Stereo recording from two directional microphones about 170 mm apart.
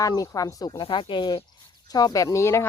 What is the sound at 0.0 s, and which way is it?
Speech, 20° left (ahead or behind).